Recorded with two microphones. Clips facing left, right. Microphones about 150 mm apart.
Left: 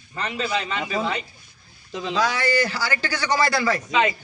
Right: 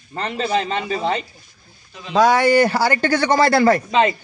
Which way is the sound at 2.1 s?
55° right (ahead or behind).